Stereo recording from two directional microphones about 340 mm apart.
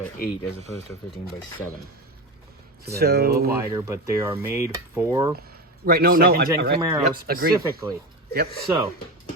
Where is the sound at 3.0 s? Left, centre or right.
Right.